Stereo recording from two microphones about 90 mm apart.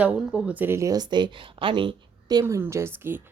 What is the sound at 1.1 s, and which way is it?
Speech, 65° right (ahead or behind).